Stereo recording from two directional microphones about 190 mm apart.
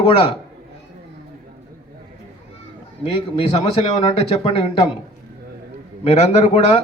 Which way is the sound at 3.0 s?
30° left (ahead or behind).